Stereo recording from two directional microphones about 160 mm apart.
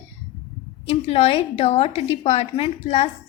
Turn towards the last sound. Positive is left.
turn(degrees=40)  # may be behind; listen again after turning